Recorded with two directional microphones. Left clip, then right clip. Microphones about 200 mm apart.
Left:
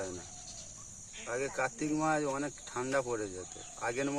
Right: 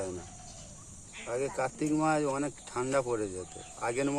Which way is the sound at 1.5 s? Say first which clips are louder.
Right 2 dB; 10° left (ahead or behind).